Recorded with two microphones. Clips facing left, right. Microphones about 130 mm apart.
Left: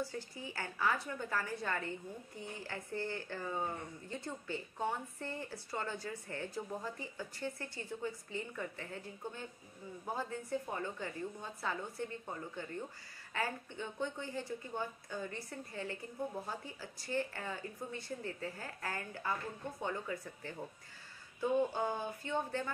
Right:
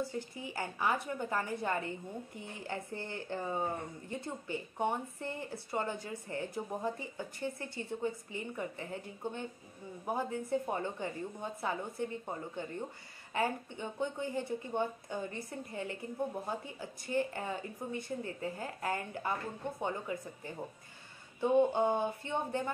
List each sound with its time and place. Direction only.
0.0 s a woman's voice: 20° right (ahead or behind)